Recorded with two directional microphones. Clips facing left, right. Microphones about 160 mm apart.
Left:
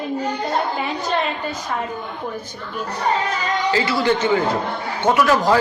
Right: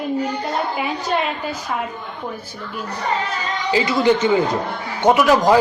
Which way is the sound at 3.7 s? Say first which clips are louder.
Right 4 dB; 15° right (ahead or behind).